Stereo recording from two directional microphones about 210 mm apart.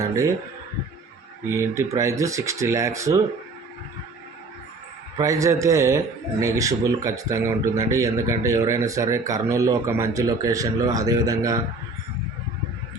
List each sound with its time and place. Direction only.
1.5 s speech: 15° right (ahead or behind)
5.1 s speech: 15° right (ahead or behind)